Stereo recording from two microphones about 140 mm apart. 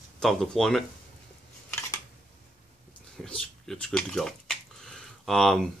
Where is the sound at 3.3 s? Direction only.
5° left (ahead or behind).